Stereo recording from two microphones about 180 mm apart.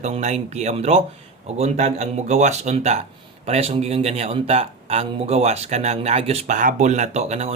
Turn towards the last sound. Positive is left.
turn(degrees=-35)  # may be behind; listen again after turning